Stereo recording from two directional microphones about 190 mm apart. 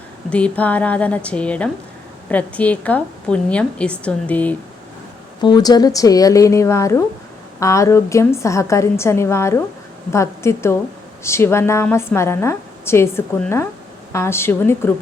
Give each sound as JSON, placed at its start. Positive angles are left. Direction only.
{"t": 0.3, "sound": "a woman's voice", "side_deg": 5}
{"t": 5.4, "sound": "a woman's voice", "side_deg": 20}